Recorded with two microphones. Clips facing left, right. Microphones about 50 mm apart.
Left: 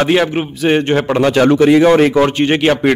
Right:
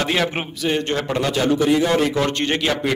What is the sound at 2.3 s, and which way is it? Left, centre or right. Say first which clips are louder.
Speech: left 8 dB; left.